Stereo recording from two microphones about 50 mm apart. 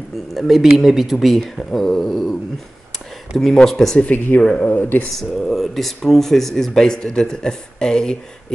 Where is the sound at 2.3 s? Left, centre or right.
Centre.